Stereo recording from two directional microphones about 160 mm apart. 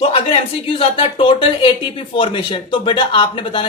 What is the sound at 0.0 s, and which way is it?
Speech, 35° left (ahead or behind).